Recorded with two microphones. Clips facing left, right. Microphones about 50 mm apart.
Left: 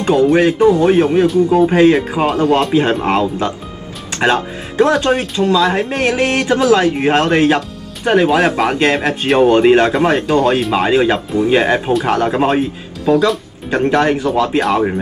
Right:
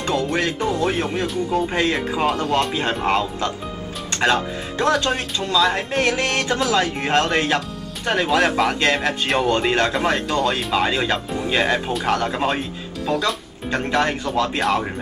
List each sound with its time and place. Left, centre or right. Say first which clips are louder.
0.0 s speech: left 10 dB; centre
2.2 s speech: left 6 dB; centre
2.7 s speech: left 7 dB; centre
5.1 s speech: left 7 dB; centre